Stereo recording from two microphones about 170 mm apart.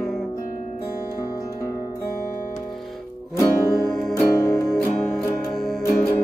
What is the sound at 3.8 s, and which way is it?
Music, centre (ahead or behind).